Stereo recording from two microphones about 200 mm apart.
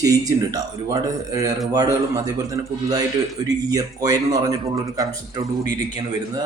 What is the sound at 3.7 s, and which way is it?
Speech, 20° right (ahead or behind).